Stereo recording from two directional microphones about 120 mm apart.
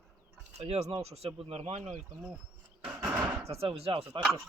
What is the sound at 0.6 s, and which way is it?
Speech, 65° right (ahead or behind).